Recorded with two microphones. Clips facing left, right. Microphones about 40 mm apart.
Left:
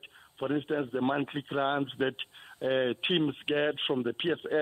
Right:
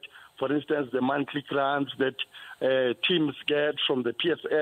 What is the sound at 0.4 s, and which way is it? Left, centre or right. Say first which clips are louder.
A man's voice: right 4 dB; right.